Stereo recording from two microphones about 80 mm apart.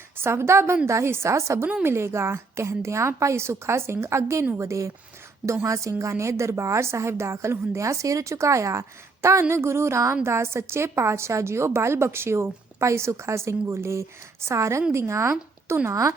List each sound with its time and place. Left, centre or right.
0.2 s a woman's voice: right